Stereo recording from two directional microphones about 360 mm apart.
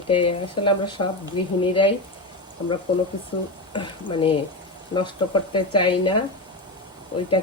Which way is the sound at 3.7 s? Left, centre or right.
Centre.